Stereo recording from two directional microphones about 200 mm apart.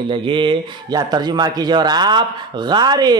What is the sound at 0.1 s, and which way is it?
Speech, 25° right (ahead or behind).